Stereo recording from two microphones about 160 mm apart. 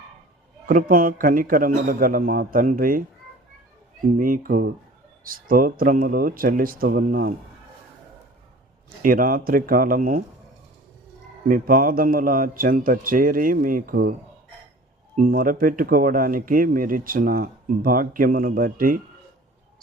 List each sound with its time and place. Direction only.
0.7 s speech: 60° right (ahead or behind)
4.2 s speech: 65° right (ahead or behind)
9.0 s speech: 60° right (ahead or behind)
11.4 s speech: 60° right (ahead or behind)